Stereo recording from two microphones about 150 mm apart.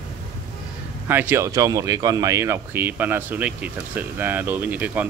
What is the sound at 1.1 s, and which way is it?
Speech, 15° right (ahead or behind).